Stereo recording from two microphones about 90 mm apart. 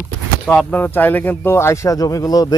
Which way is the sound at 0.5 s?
15° left (ahead or behind).